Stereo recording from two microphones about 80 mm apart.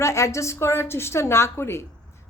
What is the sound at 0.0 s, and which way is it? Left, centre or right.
A woman's voice, left.